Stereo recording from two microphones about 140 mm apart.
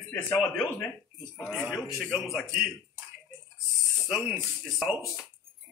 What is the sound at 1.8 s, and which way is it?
Speech, centre (ahead or behind).